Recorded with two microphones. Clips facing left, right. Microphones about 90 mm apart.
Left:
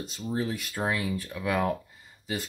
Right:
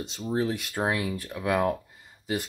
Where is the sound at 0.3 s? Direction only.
65° right (ahead or behind).